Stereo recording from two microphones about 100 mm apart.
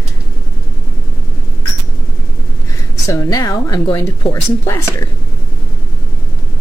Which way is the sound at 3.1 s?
40° left (ahead or behind).